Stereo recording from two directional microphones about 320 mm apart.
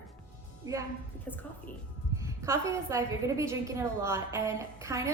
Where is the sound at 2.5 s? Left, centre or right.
Centre.